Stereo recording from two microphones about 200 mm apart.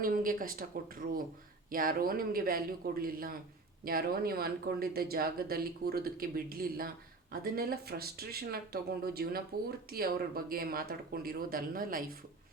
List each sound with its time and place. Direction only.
0.0 s speech: 45° right (ahead or behind)